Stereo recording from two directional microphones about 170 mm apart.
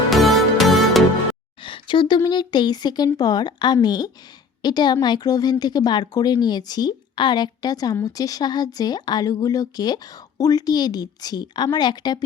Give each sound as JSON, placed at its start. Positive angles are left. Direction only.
{"t": 0.1, "sound": "music", "side_deg": 0}
{"t": 1.6, "sound": "speech", "side_deg": 30}